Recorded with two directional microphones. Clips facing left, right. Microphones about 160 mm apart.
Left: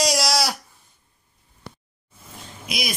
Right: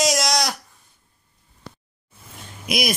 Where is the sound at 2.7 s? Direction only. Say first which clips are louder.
Right 6 dB; 55° right (ahead or behind).